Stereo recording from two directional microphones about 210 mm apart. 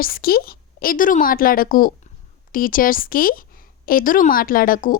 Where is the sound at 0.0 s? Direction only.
45° left (ahead or behind).